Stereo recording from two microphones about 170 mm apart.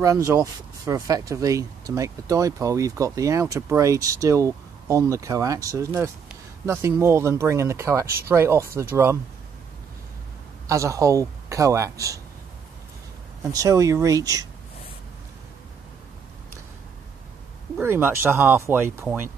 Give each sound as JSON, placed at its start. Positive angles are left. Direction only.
{"t": 0.0, "sound": "speech", "side_deg": -20}
{"t": 10.7, "sound": "speech", "side_deg": -20}
{"t": 13.5, "sound": "speech", "side_deg": -20}
{"t": 17.7, "sound": "speech", "side_deg": -15}